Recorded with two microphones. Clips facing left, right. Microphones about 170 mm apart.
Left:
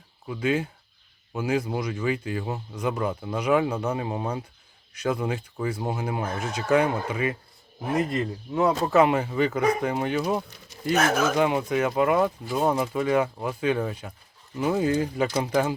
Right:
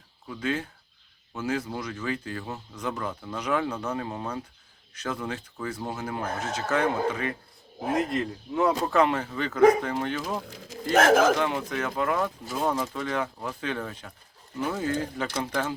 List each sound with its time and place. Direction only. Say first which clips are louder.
0.3 s speech: left 5 dB; 10° left (ahead or behind)
10.6 s speech: right 5 dB; 90° right
11.3 s speech: left 5 dB; 15° left (ahead or behind)